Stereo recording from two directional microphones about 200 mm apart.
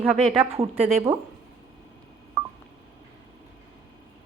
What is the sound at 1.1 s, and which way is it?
Speech, 15° right (ahead or behind).